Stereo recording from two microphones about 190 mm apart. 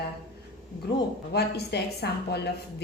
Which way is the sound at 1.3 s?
60° left (ahead or behind).